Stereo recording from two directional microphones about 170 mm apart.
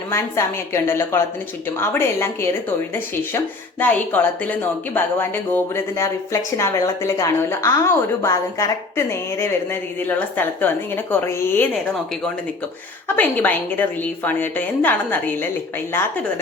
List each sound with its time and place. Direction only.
0.1 s speech: 15° left (ahead or behind)
13.1 s speech: 10° left (ahead or behind)